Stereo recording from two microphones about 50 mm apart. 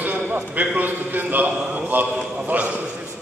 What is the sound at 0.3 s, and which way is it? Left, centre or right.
A man's voice, right.